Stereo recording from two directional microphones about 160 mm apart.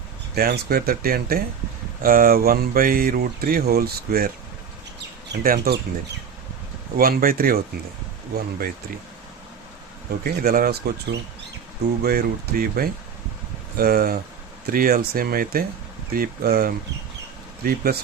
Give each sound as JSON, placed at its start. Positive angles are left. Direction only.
{"t": 0.3, "sound": "speech", "side_deg": -70}
{"t": 5.3, "sound": "speech", "side_deg": -75}
{"t": 6.9, "sound": "speech", "side_deg": -65}
{"t": 10.2, "sound": "speech", "side_deg": -65}